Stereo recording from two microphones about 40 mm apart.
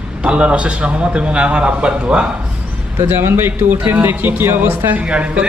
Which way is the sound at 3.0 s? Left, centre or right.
Right.